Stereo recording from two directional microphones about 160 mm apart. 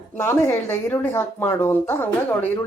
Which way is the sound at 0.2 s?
15° left (ahead or behind).